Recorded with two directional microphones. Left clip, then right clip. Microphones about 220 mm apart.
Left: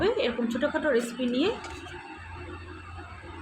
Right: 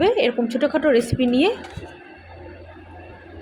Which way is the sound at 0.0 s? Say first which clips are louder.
Right 8 dB; 30° right (ahead or behind).